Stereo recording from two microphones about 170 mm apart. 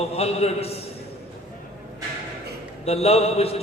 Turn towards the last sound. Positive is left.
turn(degrees=35)  # may be behind; listen again after turning